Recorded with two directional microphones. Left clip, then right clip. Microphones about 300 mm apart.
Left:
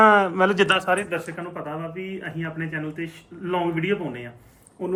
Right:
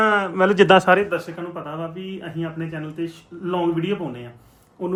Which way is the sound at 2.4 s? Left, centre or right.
Centre.